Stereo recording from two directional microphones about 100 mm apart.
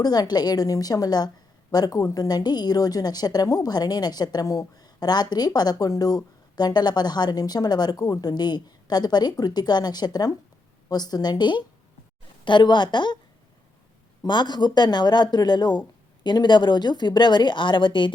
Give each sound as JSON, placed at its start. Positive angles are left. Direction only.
{"t": 0.0, "sound": "a woman's voice", "side_deg": 40}
{"t": 14.3, "sound": "a woman's voice", "side_deg": 45}